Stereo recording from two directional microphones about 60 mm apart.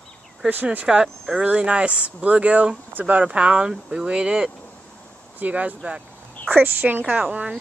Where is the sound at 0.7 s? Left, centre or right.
Centre.